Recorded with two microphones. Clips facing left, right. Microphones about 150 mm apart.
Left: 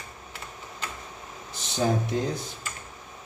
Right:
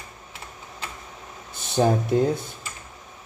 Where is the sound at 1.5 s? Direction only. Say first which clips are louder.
Right 6 dB; 55° right (ahead or behind).